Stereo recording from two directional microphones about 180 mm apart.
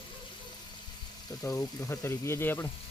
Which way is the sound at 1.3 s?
20° left (ahead or behind).